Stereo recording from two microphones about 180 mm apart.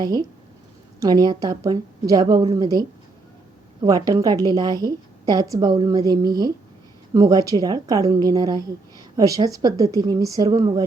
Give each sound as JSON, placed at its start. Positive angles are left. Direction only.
{"t": 0.0, "sound": "a woman's voice", "side_deg": -20}